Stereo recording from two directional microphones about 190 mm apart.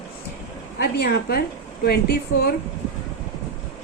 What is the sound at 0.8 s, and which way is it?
A woman's voice, 55° left (ahead or behind).